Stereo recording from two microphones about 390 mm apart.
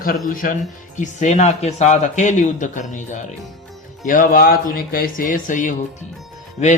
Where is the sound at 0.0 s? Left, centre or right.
Left.